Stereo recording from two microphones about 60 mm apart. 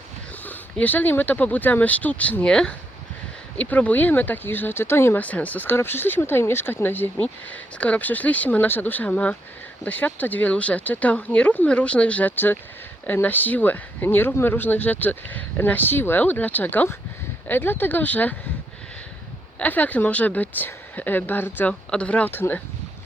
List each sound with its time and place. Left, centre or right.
0.4 s speech: left
3.6 s speech: left
5.2 s speech: left
19.5 s speech: left
21.7 s speech: centre
22.3 s speech: left